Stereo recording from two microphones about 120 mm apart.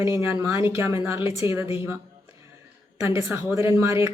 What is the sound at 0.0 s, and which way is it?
Speech, 20° right (ahead or behind).